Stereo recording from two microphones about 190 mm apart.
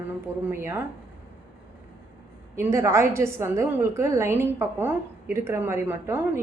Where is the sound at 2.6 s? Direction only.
15° right (ahead or behind).